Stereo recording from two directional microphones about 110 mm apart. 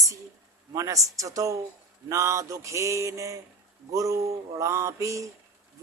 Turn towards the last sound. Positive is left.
turn(degrees=-30)  # may be behind; listen again after turning